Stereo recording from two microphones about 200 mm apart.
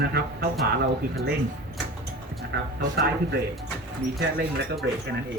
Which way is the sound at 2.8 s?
50° right (ahead or behind).